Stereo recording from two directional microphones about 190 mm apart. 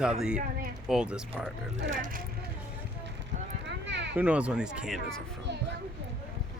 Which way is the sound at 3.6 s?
65° right (ahead or behind).